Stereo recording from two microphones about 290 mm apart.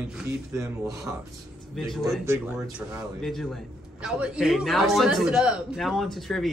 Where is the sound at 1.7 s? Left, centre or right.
Centre.